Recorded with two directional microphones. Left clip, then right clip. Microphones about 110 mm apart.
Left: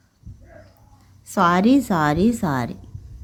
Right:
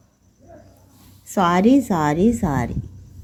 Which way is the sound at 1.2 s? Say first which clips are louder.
Even; 10° left (ahead or behind).